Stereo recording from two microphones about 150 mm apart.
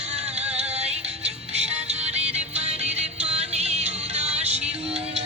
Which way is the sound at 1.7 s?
45° right (ahead or behind).